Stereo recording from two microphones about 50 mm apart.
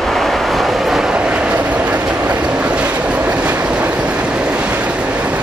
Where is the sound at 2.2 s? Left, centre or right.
Right.